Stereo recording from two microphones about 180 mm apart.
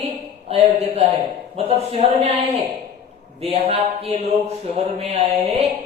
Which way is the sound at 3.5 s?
35° right (ahead or behind).